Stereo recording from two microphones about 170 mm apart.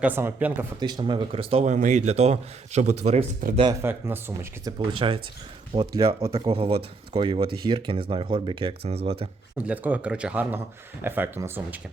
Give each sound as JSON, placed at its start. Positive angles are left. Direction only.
{"t": 0.0, "sound": "speech", "side_deg": -10}
{"t": 0.8, "sound": "speech", "side_deg": -25}
{"t": 3.7, "sound": "speech", "side_deg": -15}
{"t": 4.9, "sound": "speech", "side_deg": -30}
{"t": 9.6, "sound": "speech", "side_deg": -10}